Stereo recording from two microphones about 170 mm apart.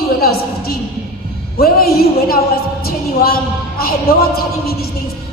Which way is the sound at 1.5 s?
65° left (ahead or behind).